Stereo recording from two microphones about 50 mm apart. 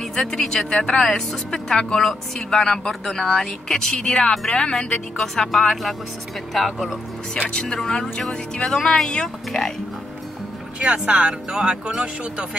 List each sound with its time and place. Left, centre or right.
0.1 s speech: centre
7.3 s speech: centre
10.8 s speech: right